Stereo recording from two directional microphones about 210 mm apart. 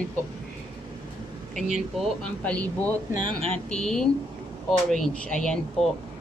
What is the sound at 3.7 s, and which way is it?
Speech, 5° left (ahead or behind).